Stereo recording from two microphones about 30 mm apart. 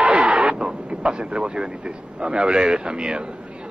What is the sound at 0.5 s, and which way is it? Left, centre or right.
A man's voice, right.